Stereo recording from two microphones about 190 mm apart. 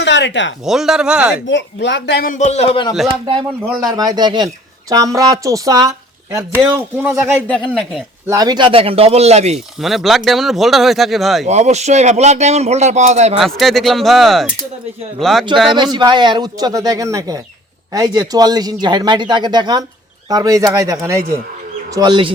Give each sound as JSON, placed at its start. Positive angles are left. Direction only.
{"t": 0.0, "sound": "speech", "side_deg": 70}
{"t": 0.6, "sound": "speech", "side_deg": 0}
{"t": 1.5, "sound": "a man's voice", "side_deg": 70}
{"t": 3.1, "sound": "speech", "side_deg": -25}
{"t": 8.3, "sound": "speech", "side_deg": -20}
{"t": 9.8, "sound": "speech", "side_deg": 0}
{"t": 11.4, "sound": "speech", "side_deg": -35}
{"t": 13.4, "sound": "speech", "side_deg": 0}
{"t": 15.7, "sound": "speech", "side_deg": -25}